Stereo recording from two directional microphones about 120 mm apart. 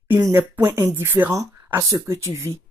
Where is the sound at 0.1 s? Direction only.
20° right (ahead or behind).